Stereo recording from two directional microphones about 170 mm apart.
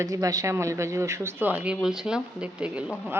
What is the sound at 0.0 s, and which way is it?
Speech, 20° right (ahead or behind).